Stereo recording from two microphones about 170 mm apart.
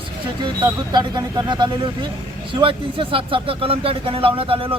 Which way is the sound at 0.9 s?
25° right (ahead or behind).